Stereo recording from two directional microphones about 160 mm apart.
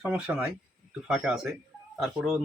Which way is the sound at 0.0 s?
5° right (ahead or behind).